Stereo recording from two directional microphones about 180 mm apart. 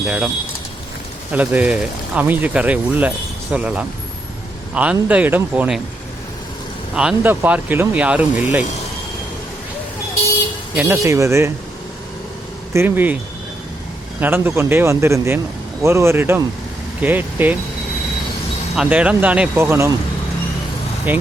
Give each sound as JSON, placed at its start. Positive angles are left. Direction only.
{"t": 0.0, "sound": "speech", "side_deg": -5}
{"t": 1.3, "sound": "speech", "side_deg": -10}
{"t": 6.9, "sound": "speech", "side_deg": -5}
{"t": 10.8, "sound": "speech", "side_deg": -15}
{"t": 12.7, "sound": "speech", "side_deg": -10}
{"t": 14.2, "sound": "speech", "side_deg": -10}
{"t": 18.8, "sound": "speech", "side_deg": -5}
{"t": 21.1, "sound": "speech", "side_deg": -10}